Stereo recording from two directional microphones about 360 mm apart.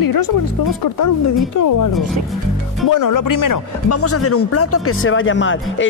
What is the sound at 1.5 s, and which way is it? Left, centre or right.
Speech, left.